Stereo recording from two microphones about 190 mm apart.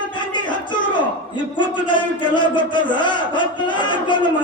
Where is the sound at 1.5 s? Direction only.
25° left (ahead or behind).